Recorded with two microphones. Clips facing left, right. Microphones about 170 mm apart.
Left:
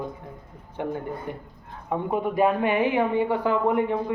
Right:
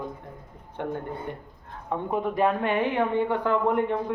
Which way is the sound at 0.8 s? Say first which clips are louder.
Left 2 dB; 5° left (ahead or behind).